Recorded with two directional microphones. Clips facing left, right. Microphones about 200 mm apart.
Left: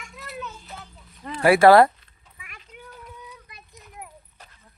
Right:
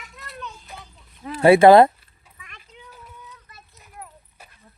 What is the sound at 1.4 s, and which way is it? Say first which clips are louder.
Speech: right 3 dB; 20° right (ahead or behind).